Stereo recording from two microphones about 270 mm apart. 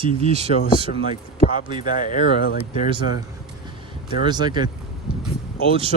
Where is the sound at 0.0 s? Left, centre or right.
Right.